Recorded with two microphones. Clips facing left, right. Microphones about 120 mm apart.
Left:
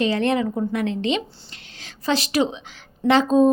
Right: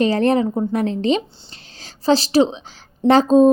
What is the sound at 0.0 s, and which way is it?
A woman's voice, 40° right (ahead or behind).